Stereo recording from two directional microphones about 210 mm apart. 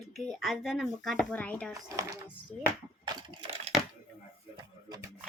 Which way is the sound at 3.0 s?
20° right (ahead or behind).